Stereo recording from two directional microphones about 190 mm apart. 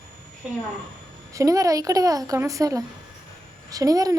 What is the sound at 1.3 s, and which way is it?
A child's voice, 15° right (ahead or behind).